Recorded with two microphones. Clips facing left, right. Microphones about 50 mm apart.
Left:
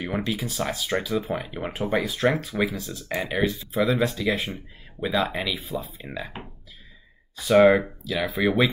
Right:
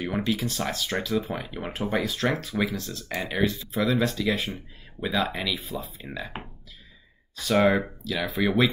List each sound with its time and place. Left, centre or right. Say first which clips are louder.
0.0 s speech: right 1 dB; centre
7.3 s speech: left 5 dB; centre